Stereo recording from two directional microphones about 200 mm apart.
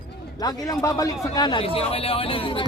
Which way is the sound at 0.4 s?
15° left (ahead or behind).